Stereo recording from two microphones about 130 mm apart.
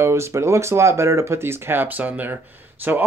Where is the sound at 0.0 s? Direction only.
20° right (ahead or behind).